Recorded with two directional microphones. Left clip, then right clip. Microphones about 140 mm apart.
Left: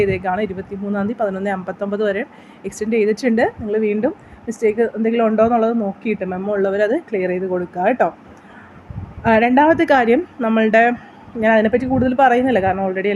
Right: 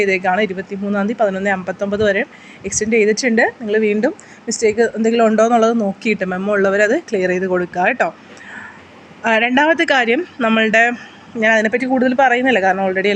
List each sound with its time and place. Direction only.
0.0 s speech: centre (ahead or behind)
3.8 s speech: 5° right (ahead or behind)
6.4 s speech: 5° right (ahead or behind)
7.2 s speech: 15° right (ahead or behind)
7.6 s speech: centre (ahead or behind)
9.2 s speech: 5° right (ahead or behind)
12.6 s speech: 5° right (ahead or behind)